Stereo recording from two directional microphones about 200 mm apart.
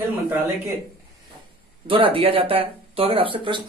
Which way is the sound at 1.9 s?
25° right (ahead or behind).